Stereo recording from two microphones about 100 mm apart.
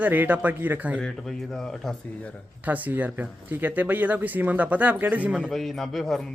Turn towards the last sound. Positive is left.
turn(degrees=5)  # may be behind; listen again after turning